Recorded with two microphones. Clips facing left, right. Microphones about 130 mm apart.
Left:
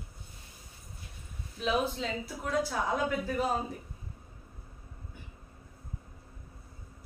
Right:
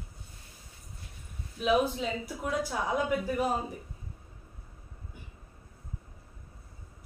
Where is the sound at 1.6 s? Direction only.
10° right (ahead or behind).